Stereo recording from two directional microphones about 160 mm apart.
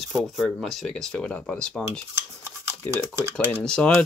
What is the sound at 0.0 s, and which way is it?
Speech, centre (ahead or behind).